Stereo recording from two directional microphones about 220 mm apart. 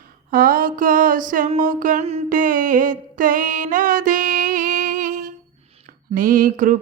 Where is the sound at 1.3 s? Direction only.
35° right (ahead or behind).